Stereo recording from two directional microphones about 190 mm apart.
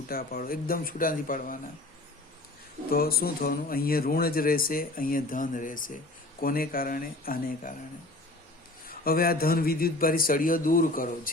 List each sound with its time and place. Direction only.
0.1 s speech: 50° left (ahead or behind)
2.9 s speech: 50° left (ahead or behind)
8.9 s speech: 50° left (ahead or behind)